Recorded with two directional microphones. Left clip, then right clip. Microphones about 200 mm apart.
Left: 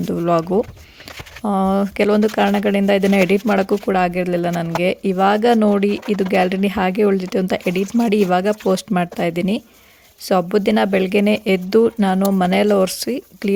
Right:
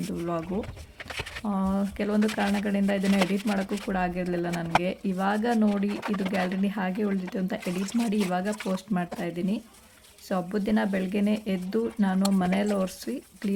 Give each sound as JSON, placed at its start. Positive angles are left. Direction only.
{"t": 0.1, "sound": "speech", "side_deg": 45}